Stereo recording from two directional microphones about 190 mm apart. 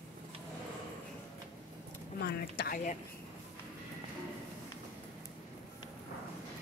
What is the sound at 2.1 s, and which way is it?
Speech, 55° left (ahead or behind).